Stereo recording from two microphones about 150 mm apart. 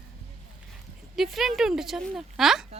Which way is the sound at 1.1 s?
Centre (ahead or behind).